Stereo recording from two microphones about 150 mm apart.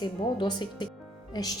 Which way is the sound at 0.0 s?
30° left (ahead or behind).